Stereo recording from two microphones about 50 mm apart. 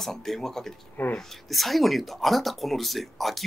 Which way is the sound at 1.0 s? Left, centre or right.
Left.